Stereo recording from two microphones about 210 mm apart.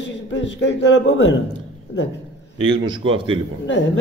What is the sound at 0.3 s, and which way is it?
A man's voice, 60° left (ahead or behind).